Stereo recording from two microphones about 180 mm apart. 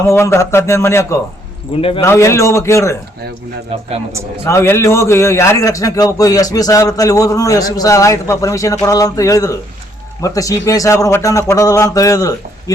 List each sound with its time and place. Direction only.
0.1 s a man's voice: 15° left (ahead or behind)
1.7 s speech: 30° left (ahead or behind)
2.0 s a man's voice: 15° left (ahead or behind)
4.4 s a man's voice: 15° left (ahead or behind)